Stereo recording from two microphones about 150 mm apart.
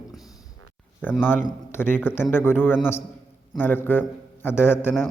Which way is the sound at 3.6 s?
15° left (ahead or behind).